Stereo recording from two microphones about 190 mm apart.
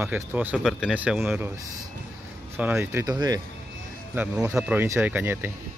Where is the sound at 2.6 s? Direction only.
10° right (ahead or behind).